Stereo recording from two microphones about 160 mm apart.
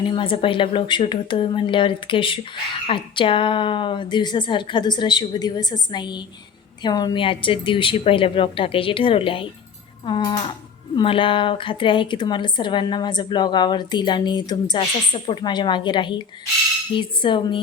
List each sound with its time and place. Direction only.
0.0 s a woman's voice: 30° left (ahead or behind)